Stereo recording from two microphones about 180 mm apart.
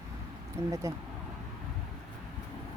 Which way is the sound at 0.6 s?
15° right (ahead or behind).